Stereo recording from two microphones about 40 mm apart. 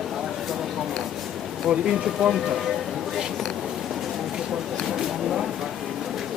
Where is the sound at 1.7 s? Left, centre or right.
Right.